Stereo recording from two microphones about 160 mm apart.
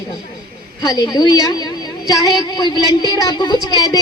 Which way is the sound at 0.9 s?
25° left (ahead or behind).